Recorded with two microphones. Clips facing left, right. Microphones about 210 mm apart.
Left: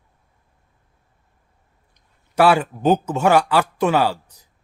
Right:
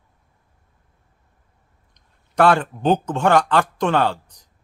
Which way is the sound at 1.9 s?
5° left (ahead or behind).